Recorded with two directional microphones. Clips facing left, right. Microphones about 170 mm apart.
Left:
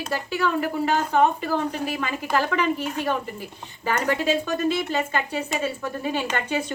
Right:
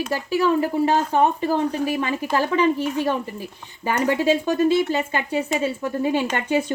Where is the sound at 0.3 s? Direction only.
10° right (ahead or behind).